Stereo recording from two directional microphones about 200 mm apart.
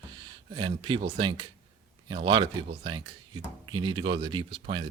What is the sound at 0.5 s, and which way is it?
Speech, 25° right (ahead or behind).